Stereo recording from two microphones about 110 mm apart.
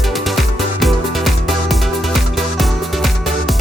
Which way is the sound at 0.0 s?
Centre (ahead or behind).